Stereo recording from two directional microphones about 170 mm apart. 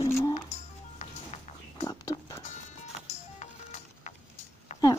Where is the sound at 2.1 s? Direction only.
35° left (ahead or behind).